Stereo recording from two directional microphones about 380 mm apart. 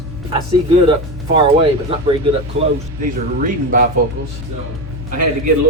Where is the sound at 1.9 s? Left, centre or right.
Centre.